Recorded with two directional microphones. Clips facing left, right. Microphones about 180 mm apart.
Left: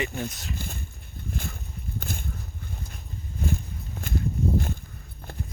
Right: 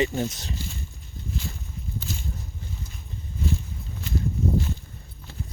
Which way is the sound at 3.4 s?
55° left (ahead or behind).